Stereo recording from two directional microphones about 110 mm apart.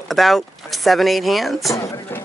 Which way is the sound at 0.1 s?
Centre (ahead or behind).